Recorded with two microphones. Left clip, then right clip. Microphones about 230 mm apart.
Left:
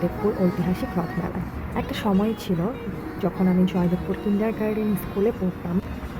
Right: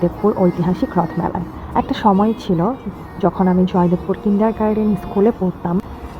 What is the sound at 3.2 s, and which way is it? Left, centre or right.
A woman's voice, right.